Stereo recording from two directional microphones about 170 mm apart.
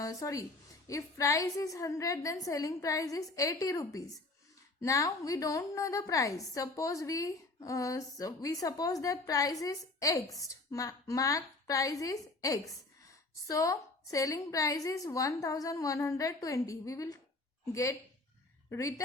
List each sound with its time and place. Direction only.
0.0 s a woman's voice: 20° left (ahead or behind)